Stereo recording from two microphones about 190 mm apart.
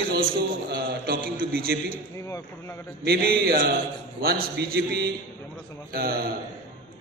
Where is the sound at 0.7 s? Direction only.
55° right (ahead or behind).